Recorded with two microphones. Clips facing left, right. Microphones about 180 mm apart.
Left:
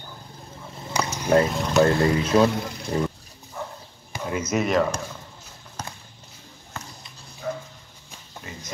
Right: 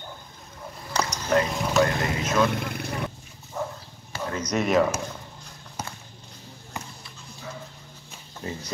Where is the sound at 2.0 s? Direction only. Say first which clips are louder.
Left 5 dB; 30° left (ahead or behind).